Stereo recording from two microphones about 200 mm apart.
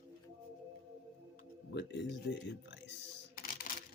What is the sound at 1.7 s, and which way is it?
Speech, 60° left (ahead or behind).